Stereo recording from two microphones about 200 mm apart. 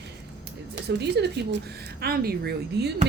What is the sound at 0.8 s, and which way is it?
Speech, 60° right (ahead or behind).